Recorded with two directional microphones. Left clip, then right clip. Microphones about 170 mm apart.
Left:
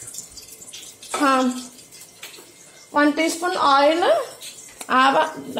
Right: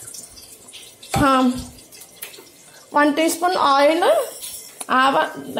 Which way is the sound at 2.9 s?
30° right (ahead or behind).